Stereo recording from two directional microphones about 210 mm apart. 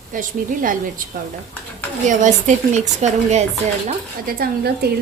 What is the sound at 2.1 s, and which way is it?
Speech, 35° right (ahead or behind).